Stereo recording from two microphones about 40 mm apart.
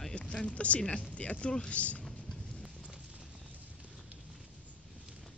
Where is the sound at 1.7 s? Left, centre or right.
Left.